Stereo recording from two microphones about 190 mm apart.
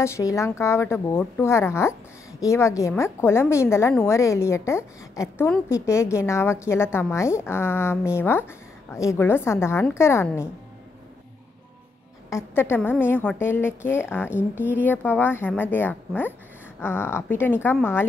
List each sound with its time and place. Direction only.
0.0 s a woman's voice: 15° left (ahead or behind)
12.3 s a woman's voice: 15° left (ahead or behind)